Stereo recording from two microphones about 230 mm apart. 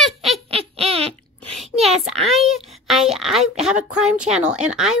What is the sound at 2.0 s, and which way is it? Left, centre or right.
Speech, centre.